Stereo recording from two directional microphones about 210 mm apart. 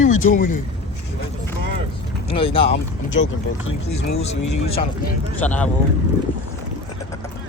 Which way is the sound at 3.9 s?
30° left (ahead or behind).